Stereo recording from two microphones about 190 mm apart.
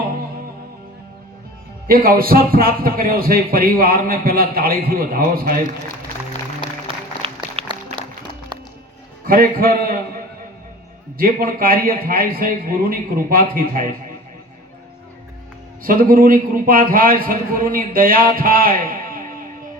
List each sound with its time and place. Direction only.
1.9 s a man's voice: 50° right (ahead or behind)
6.6 s music: 30° right (ahead or behind)
9.2 s a man's voice: 50° right (ahead or behind)
11.2 s a man's voice: 50° right (ahead or behind)
15.8 s a man's voice: 50° right (ahead or behind)